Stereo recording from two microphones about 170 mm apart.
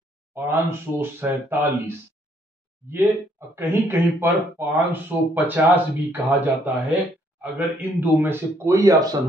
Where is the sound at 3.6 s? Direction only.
15° right (ahead or behind).